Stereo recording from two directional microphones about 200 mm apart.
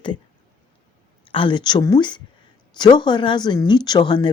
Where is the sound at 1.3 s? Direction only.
25° left (ahead or behind).